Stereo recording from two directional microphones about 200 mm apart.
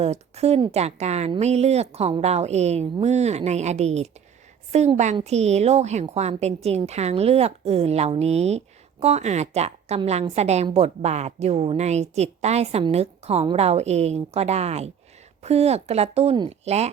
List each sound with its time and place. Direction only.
0.0 s a woman's voice: 30° right (ahead or behind)